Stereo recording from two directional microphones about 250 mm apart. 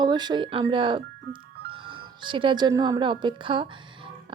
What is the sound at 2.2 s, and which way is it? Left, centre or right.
Speech, centre.